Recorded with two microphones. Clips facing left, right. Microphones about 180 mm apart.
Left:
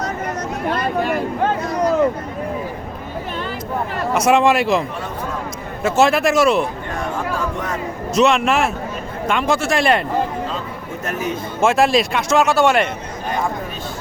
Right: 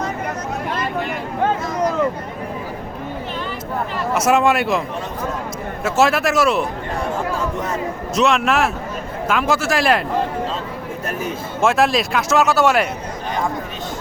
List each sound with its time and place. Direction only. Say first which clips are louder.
0.7 s a sound: left 5 dB; 40° left (ahead or behind)
4.1 s a man's voice: left 2 dB; 5° right (ahead or behind)
5.8 s a man's voice: left 2 dB; centre (ahead or behind)
8.1 s a man's voice: left 2 dB; centre (ahead or behind)
11.6 s a man's voice: left 2 dB; centre (ahead or behind)